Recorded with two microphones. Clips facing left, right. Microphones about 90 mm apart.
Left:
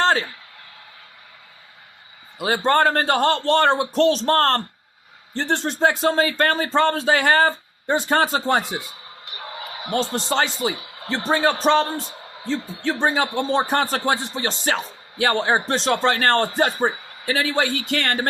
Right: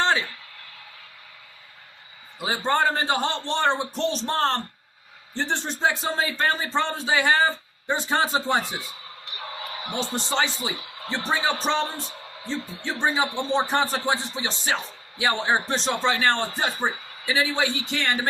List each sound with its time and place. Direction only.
0.0 s a sound: 40° left (ahead or behind)
2.4 s a man's voice: 65° left (ahead or behind); by 4.4 s 90° left
4.4 s speech: 50° left (ahead or behind)
5.4 s a man's voice: 75° left (ahead or behind)
10.0 s speech: centre (ahead or behind)
10.2 s a man's voice: 55° left (ahead or behind)
16.0 s a man's voice: 50° left (ahead or behind)